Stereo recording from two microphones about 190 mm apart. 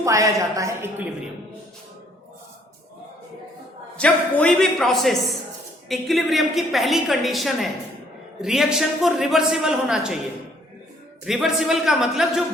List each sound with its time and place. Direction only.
0.0 s a woman's voice: 15° right (ahead or behind)
3.9 s a woman's voice: 5° left (ahead or behind)
11.3 s a woman's voice: centre (ahead or behind)